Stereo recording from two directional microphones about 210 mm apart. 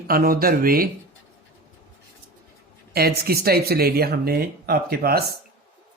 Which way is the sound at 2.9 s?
45° right (ahead or behind).